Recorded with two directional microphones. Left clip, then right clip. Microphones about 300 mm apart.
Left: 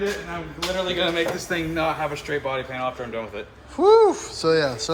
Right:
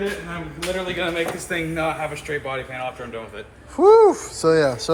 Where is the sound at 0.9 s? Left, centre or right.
Left.